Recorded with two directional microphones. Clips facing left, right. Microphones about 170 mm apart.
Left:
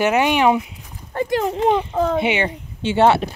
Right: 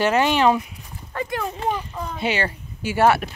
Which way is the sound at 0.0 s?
15° left (ahead or behind).